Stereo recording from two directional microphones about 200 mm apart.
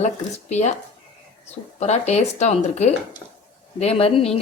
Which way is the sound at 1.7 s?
35° left (ahead or behind).